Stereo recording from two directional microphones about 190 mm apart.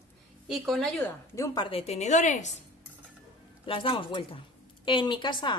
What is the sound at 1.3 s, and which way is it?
Speech, 20° left (ahead or behind).